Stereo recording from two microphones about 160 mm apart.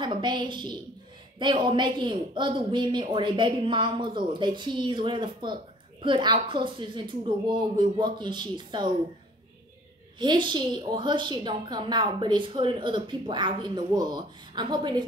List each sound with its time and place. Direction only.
0.0 s a woman's voice: 30° right (ahead or behind)
10.1 s a woman's voice: 30° right (ahead or behind)